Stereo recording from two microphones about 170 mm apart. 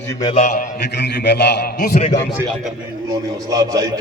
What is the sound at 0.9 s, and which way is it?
A man's voice, 75° left (ahead or behind).